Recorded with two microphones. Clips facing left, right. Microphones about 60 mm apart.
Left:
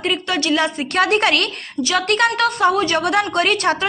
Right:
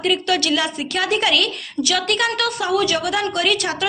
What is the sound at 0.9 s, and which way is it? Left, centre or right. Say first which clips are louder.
Speech: left 3 dB; left.